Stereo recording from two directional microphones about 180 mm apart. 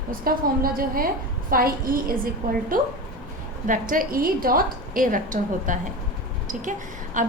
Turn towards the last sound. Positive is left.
turn(degrees=-45)  # may be behind; listen again after turning